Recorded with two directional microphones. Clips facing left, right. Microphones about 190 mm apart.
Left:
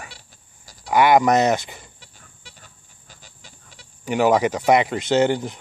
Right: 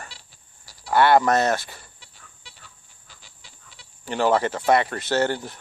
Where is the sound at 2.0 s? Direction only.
45° left (ahead or behind).